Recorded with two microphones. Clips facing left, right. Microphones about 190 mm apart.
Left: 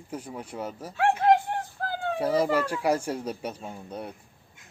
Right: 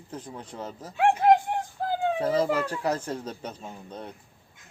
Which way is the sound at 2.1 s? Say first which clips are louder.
Left 3 dB; 10° left (ahead or behind).